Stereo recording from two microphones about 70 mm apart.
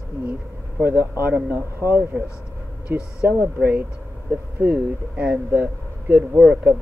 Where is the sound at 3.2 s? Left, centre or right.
Right.